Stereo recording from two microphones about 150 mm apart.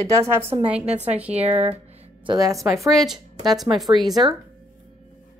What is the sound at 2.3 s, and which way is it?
Speech, 25° right (ahead or behind).